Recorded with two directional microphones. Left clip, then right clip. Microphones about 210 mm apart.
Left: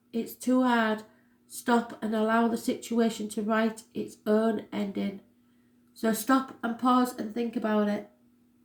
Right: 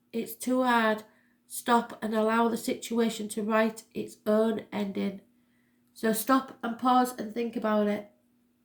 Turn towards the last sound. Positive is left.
turn(degrees=-30)  # may be behind; listen again after turning